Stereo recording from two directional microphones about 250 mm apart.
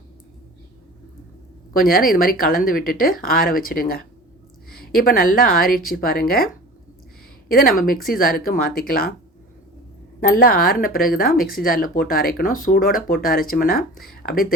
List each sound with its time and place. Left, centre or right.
1.7 s speech: left
10.2 s speech: left